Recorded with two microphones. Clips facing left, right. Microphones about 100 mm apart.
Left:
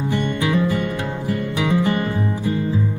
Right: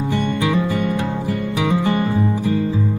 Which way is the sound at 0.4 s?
20° right (ahead or behind).